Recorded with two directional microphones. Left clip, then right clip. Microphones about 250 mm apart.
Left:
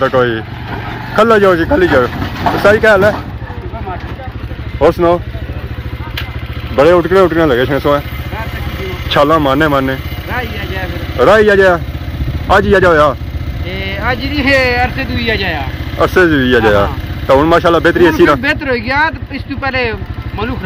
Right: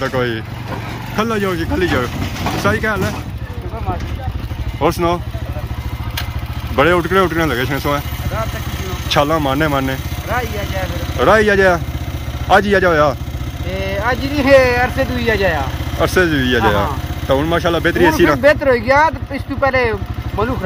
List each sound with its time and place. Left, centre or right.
0.0 s speech: centre
4.8 s speech: centre
6.8 s speech: centre
9.1 s speech: centre
14.2 s speech: right
16.0 s speech: centre
19.7 s speech: right